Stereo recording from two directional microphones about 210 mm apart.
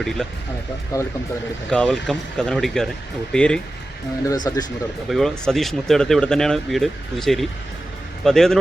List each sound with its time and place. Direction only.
0.0 s speech: centre (ahead or behind)
0.9 s speech: 15° left (ahead or behind)
1.7 s speech: centre (ahead or behind)
4.3 s speech: 15° left (ahead or behind)
5.0 s speech: centre (ahead or behind)